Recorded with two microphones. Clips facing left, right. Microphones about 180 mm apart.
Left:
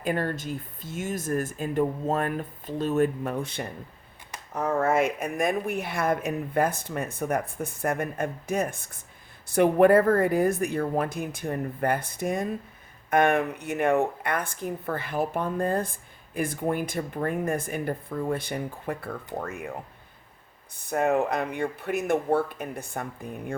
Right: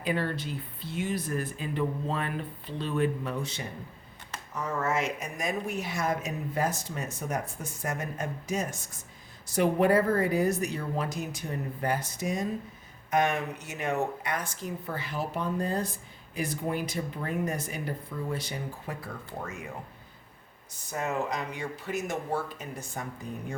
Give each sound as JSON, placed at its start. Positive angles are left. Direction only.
{"t": 0.0, "sound": "a woman's voice", "side_deg": 45}
{"t": 20.7, "sound": "a woman's voice", "side_deg": 60}